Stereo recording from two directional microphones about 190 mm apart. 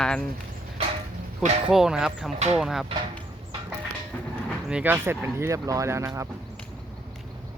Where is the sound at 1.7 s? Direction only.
5° right (ahead or behind).